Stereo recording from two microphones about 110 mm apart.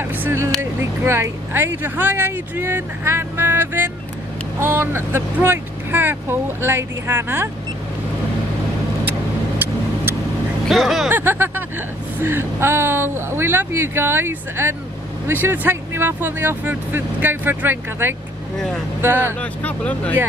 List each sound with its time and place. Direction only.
0.0 s vehicle: 20° right (ahead or behind)
0.6 s speech: 25° right (ahead or behind)
10.7 s speech: centre (ahead or behind)
11.1 s speech: 20° right (ahead or behind)
19.4 s speech: 10° left (ahead or behind)